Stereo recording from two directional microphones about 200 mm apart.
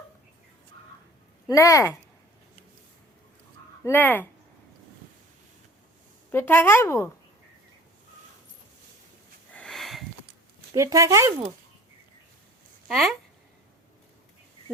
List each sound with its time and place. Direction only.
1.5 s a woman's voice: 15° left (ahead or behind)
3.8 s a woman's voice: 10° left (ahead or behind)
6.3 s a woman's voice: 10° left (ahead or behind)
9.6 s sniff: centre (ahead or behind)
10.8 s speech: 15° right (ahead or behind)
12.9 s speech: centre (ahead or behind)